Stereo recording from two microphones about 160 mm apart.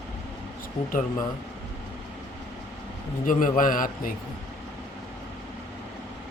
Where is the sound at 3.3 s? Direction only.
55° left (ahead or behind).